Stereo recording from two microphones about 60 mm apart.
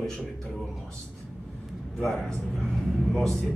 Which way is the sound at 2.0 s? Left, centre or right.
Centre.